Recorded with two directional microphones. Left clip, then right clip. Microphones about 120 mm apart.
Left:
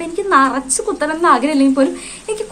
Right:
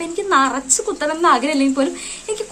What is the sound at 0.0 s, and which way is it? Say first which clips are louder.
A woman's voice: left 3 dB; 15° right (ahead or behind).